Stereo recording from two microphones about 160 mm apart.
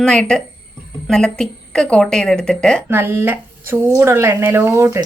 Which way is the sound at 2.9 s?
15° right (ahead or behind).